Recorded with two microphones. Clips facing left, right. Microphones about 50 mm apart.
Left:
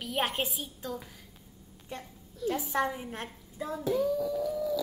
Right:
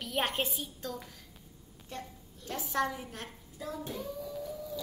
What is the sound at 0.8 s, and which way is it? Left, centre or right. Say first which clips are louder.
A woman's voice: left 2 dB; centre.